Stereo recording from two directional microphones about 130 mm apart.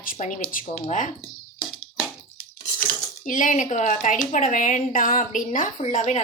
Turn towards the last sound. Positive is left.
turn(degrees=60)  # may be behind; listen again after turning